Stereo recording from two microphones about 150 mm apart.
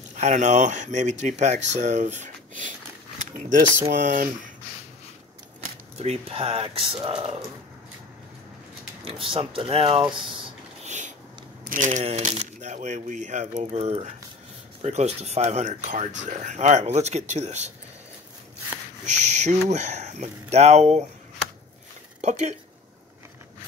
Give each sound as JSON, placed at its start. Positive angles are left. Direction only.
{"t": 0.1, "sound": "speech", "side_deg": -55}
{"t": 3.9, "sound": "speech", "side_deg": -60}
{"t": 5.9, "sound": "speech", "side_deg": -40}
{"t": 9.0, "sound": "speech", "side_deg": -40}
{"t": 10.8, "sound": "a sound", "side_deg": -50}
{"t": 11.6, "sound": "speech", "side_deg": -60}
{"t": 12.0, "sound": "speech", "side_deg": -45}
{"t": 19.0, "sound": "speech", "side_deg": -50}
{"t": 22.2, "sound": "speech", "side_deg": -50}